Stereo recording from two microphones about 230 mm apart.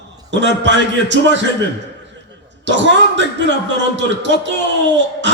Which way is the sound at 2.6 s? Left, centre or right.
Right.